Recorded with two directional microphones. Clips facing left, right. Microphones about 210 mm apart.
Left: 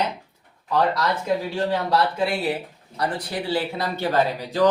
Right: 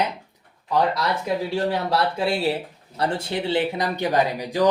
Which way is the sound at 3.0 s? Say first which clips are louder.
Right 2 dB; 25° right (ahead or behind).